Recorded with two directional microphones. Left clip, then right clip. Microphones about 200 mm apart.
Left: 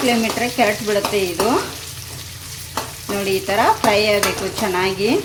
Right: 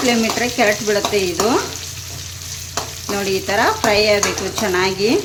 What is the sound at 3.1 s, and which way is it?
Stir, 5° right (ahead or behind).